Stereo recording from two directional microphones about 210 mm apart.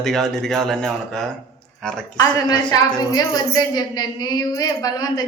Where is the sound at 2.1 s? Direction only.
20° left (ahead or behind).